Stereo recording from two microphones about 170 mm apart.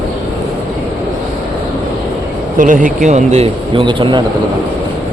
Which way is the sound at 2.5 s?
50° right (ahead or behind).